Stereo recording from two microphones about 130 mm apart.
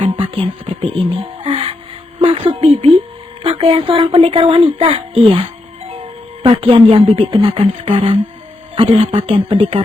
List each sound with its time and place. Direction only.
0.0 s music: 45° right (ahead or behind)
2.2 s speech: 45° right (ahead or behind)